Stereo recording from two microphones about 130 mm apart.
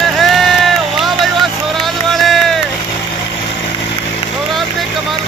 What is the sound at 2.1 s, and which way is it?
Music, centre (ahead or behind).